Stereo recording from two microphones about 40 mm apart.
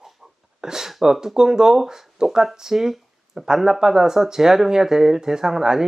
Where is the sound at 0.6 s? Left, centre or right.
Centre.